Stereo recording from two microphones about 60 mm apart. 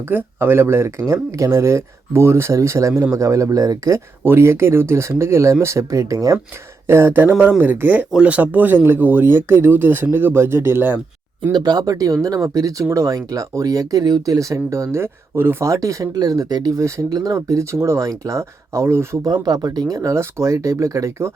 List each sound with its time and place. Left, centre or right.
0.3 s speech: right
4.2 s speech: right
6.8 s speech: right
7.6 s speech: right
11.6 s speech: right
15.6 s speech: right
17.3 s speech: right
18.0 s speech: right
19.2 s speech: right
20.1 s speech: right